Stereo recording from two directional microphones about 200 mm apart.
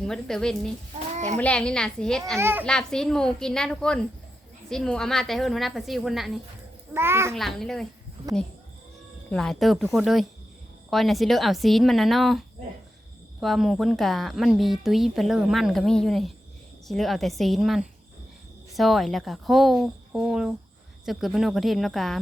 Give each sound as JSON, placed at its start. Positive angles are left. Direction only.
{"t": 0.0, "sound": "speech", "side_deg": 5}
{"t": 1.1, "sound": "a sound", "side_deg": -35}
{"t": 1.4, "sound": "speech", "side_deg": 5}
{"t": 2.4, "sound": "a child's voice", "side_deg": -10}
{"t": 2.6, "sound": "speech", "side_deg": 5}
{"t": 6.9, "sound": "a child's voice", "side_deg": -10}
{"t": 7.3, "sound": "speech", "side_deg": 0}
{"t": 9.3, "sound": "speech", "side_deg": 5}